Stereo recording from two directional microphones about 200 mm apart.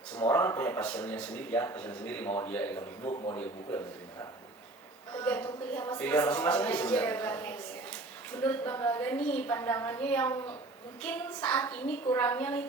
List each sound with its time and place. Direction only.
0.2 s a man's voice: 10° left (ahead or behind)
3.0 s a man's voice: 25° left (ahead or behind)
3.3 s a man's voice: 10° left (ahead or behind)